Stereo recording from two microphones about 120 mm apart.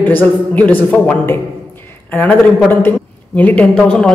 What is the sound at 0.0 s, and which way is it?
A woman's voice, 15° left (ahead or behind).